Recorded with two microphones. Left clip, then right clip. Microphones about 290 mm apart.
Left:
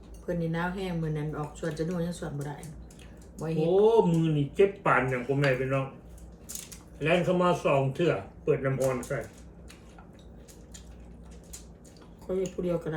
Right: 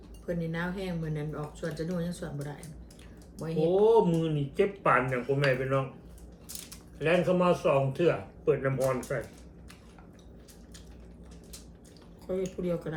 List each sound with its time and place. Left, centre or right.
0.3 s speech: centre
12.3 s speech: centre